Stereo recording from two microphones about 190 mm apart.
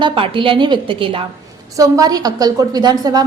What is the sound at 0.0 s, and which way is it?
A woman's voice, 25° right (ahead or behind).